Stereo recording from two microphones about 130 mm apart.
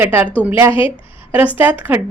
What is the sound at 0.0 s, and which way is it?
A woman's voice, 15° right (ahead or behind).